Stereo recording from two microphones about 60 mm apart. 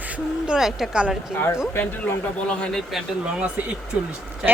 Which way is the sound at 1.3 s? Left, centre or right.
Left.